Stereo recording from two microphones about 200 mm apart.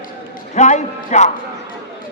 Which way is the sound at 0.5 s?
35° left (ahead or behind).